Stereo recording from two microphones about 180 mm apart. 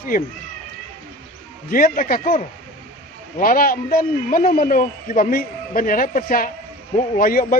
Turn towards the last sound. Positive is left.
turn(degrees=55)  # may be behind; listen again after turning